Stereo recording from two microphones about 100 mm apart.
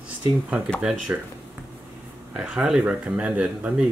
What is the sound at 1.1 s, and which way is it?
Speech, 15° right (ahead or behind).